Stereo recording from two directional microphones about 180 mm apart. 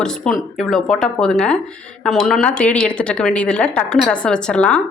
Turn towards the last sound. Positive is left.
turn(degrees=5)  # may be behind; listen again after turning